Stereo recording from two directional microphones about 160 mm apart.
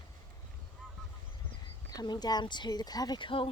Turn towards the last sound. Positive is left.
turn(degrees=30)  # may be behind; listen again after turning